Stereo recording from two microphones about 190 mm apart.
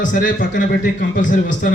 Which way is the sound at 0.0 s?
45° left (ahead or behind).